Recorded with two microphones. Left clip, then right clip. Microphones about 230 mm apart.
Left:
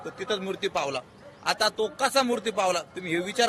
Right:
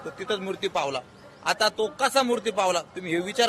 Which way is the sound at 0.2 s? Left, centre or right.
Centre.